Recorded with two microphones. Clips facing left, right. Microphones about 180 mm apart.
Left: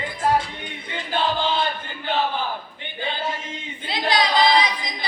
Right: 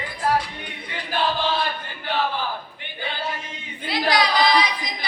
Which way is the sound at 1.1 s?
25° left (ahead or behind).